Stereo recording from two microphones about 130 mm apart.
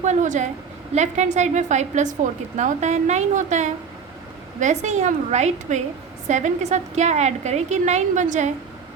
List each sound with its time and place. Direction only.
0.0 s a woman's voice: 65° right (ahead or behind)